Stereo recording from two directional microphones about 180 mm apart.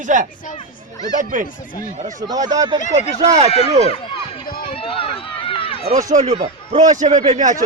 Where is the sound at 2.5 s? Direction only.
20° right (ahead or behind).